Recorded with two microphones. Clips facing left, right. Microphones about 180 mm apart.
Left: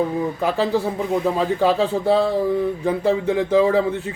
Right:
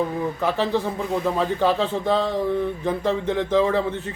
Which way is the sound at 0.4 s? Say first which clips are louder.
Left 2 dB; 10° left (ahead or behind).